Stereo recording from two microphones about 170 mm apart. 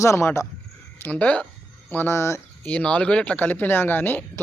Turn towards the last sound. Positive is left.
turn(degrees=10)  # may be behind; listen again after turning